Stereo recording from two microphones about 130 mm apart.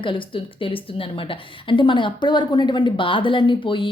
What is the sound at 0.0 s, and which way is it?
A woman's voice, 40° left (ahead or behind).